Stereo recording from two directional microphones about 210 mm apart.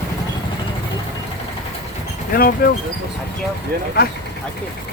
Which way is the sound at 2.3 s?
45° left (ahead or behind).